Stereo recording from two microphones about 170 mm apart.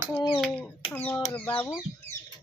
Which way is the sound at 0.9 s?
10° left (ahead or behind).